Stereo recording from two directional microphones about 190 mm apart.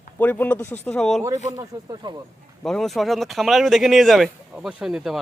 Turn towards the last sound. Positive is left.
turn(degrees=0)  # may be behind; listen again after turning